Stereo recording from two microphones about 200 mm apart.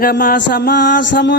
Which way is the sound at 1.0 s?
60° left (ahead or behind).